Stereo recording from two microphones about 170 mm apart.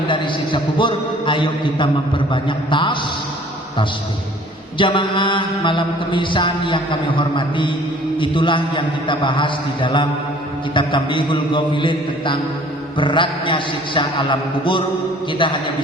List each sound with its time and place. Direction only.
0.1 s mantra: 30° left (ahead or behind)
4.8 s mantra: 30° left (ahead or behind)